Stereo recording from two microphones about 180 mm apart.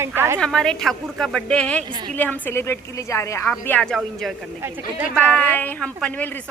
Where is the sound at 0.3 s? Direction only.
5° left (ahead or behind).